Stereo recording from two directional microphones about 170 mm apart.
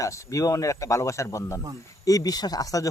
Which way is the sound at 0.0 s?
20° left (ahead or behind).